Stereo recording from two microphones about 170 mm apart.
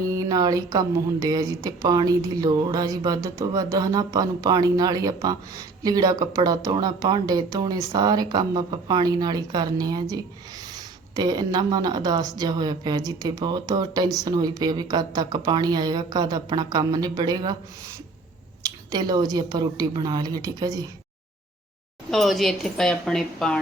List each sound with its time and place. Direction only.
0.1 s speech: 20° right (ahead or behind)
18.6 s speech: 25° right (ahead or behind)
22.1 s speech: centre (ahead or behind)